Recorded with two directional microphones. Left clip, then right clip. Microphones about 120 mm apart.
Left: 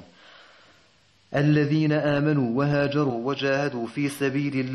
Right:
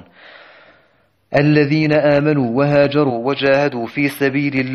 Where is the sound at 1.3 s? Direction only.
20° right (ahead or behind).